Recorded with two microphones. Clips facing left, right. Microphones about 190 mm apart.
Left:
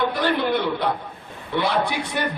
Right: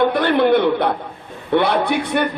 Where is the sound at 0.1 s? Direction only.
60° right (ahead or behind).